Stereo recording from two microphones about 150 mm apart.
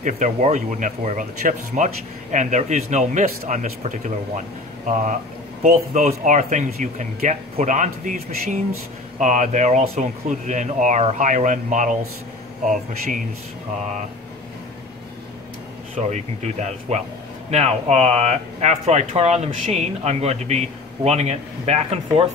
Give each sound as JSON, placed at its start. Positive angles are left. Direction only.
{"t": 0.0, "sound": "speech", "side_deg": -55}
{"t": 16.0, "sound": "speech", "side_deg": -50}